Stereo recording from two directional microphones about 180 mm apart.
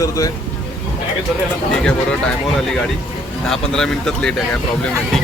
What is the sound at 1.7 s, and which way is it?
Speech, 5° left (ahead or behind).